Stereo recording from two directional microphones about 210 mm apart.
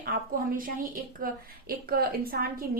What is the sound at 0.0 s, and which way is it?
A woman's voice, 40° right (ahead or behind).